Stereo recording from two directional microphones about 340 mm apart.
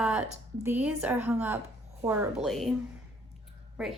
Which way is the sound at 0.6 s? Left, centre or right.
Centre.